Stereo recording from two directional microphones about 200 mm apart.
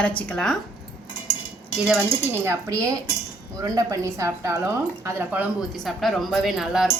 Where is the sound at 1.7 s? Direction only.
5° right (ahead or behind).